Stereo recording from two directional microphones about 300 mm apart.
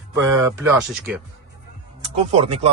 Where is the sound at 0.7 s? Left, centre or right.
Centre.